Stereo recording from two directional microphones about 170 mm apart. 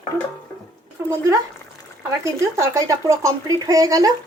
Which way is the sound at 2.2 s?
15° right (ahead or behind).